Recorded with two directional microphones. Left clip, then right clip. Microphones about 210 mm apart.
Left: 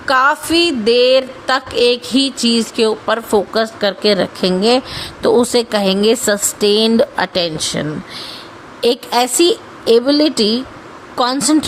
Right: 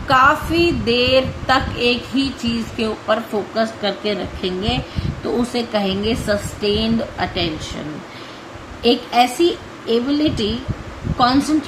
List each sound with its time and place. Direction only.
0.1 s a sound: 50° left (ahead or behind)
5.2 s a woman's voice: 55° left (ahead or behind)
8.8 s a woman's voice: 55° left (ahead or behind)